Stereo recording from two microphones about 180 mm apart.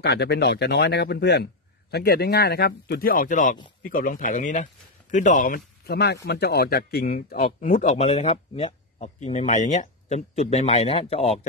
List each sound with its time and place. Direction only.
0.0 s a man's voice: 65° left (ahead or behind); by 11.4 s 35° left (ahead or behind)